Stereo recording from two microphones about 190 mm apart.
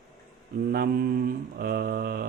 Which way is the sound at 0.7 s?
50° right (ahead or behind).